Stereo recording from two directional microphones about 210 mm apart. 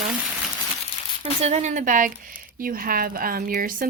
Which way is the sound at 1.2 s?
30° right (ahead or behind).